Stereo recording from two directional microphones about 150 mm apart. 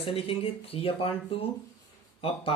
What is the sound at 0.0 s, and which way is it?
Speech, 35° left (ahead or behind).